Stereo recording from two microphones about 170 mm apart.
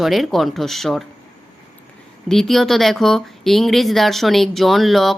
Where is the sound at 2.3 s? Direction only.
Centre (ahead or behind).